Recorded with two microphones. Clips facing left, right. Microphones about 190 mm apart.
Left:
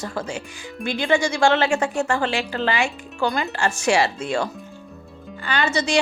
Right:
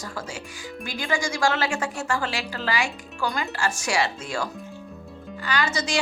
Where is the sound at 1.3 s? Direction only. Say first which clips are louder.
Left 6 dB; 25° left (ahead or behind).